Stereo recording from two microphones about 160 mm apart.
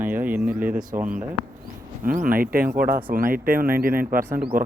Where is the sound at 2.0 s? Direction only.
60° right (ahead or behind).